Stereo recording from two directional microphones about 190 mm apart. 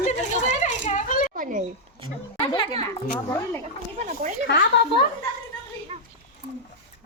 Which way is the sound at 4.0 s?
40° right (ahead or behind).